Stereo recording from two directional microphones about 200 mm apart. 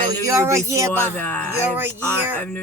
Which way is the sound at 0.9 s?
10° left (ahead or behind).